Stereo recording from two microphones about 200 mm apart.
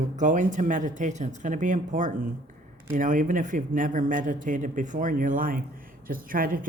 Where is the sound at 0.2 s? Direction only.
40° right (ahead or behind).